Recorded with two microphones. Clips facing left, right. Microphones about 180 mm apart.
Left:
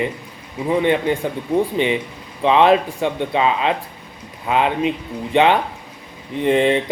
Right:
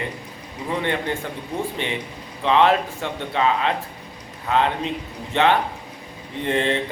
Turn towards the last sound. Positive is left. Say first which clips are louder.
# left 6 dB
turn(degrees=15)  # may be behind; listen again after turning